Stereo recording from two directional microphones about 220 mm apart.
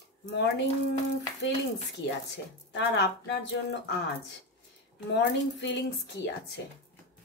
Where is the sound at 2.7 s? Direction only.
55° left (ahead or behind).